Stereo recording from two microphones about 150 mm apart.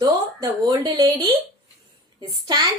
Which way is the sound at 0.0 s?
25° right (ahead or behind).